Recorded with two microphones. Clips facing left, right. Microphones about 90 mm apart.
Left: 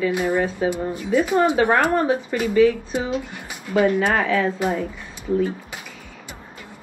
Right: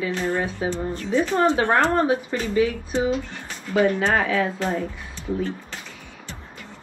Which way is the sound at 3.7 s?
10° left (ahead or behind).